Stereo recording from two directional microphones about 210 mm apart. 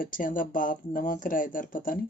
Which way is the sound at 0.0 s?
40° left (ahead or behind).